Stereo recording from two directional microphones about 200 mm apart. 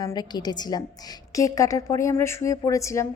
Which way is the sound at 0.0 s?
20° left (ahead or behind).